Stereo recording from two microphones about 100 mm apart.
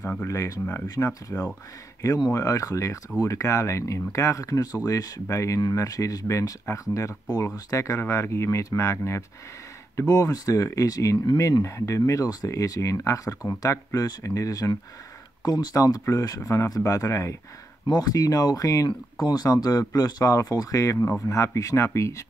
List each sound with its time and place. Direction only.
0.2 s speech: 30° left (ahead or behind)